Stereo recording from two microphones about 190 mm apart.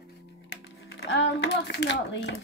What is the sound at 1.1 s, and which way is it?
Speech, 65° left (ahead or behind).